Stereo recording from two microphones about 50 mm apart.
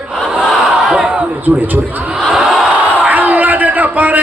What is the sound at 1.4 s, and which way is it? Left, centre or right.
Speech, right.